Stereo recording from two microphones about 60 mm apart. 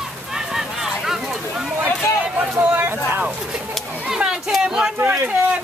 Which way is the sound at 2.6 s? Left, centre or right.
Right.